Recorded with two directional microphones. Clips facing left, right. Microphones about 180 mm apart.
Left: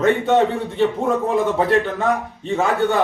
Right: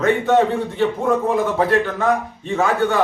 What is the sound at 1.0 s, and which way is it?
Speech, 20° left (ahead or behind).